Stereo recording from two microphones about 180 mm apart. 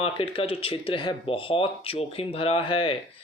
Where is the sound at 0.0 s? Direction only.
30° left (ahead or behind).